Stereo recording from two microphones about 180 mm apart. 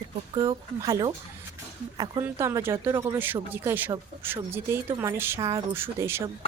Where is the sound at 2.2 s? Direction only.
15° right (ahead or behind).